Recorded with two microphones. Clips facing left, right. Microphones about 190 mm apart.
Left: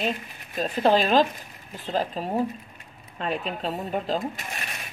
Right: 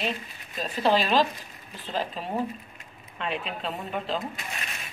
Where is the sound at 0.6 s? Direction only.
45° left (ahead or behind).